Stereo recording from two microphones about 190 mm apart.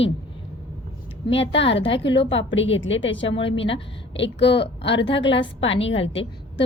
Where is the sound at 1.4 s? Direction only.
75° left (ahead or behind).